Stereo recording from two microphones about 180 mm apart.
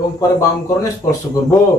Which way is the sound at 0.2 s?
15° left (ahead or behind).